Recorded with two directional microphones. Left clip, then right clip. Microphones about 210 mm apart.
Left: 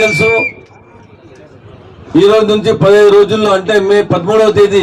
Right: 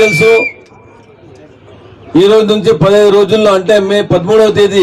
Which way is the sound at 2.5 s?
50° right (ahead or behind).